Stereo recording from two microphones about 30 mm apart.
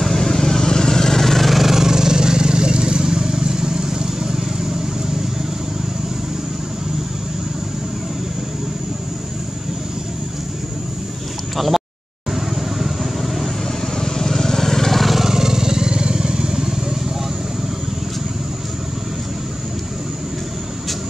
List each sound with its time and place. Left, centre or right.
0.0 s vehicle: centre; by 4.7 s right
11.5 s a sound: centre
12.3 s vehicle: centre
13.2 s vehicle: centre
13.9 s vehicle: centre
15.1 s vehicle: centre